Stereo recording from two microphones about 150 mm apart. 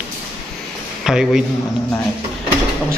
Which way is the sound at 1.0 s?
5° right (ahead or behind).